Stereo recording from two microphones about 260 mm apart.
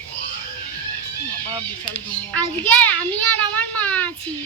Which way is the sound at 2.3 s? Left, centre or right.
Centre.